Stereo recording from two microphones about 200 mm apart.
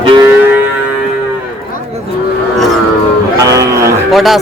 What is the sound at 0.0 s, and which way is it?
Music, 25° right (ahead or behind).